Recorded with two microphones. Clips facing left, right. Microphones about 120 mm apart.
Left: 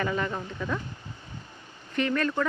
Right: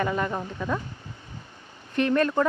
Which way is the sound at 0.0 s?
10° right (ahead or behind).